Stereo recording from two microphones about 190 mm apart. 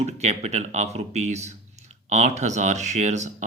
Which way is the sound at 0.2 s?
35° right (ahead or behind).